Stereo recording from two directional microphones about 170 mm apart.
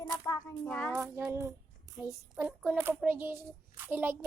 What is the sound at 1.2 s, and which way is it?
A child's voice, 15° right (ahead or behind).